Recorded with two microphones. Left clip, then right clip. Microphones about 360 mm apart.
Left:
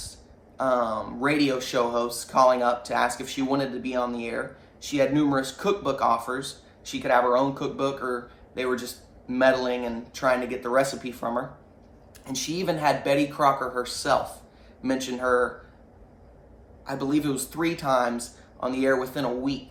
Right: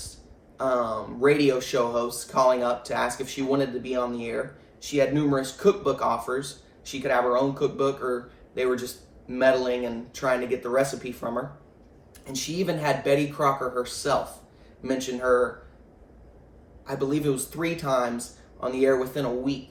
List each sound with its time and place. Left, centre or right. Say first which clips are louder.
0.5 s speech: left 1 dB; centre
9.2 s speech: even; centre
16.8 s speech: even; centre